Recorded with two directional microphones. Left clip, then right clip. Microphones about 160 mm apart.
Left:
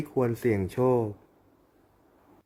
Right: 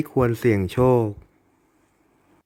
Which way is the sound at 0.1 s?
45° right (ahead or behind).